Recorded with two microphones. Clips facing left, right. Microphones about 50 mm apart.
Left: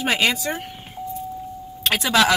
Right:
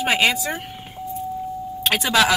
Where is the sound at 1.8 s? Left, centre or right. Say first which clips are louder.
Even; centre.